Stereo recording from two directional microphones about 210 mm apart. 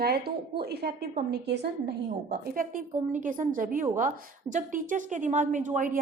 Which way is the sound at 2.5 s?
40° right (ahead or behind).